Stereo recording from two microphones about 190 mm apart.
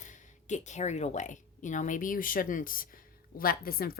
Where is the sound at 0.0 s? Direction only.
40° left (ahead or behind).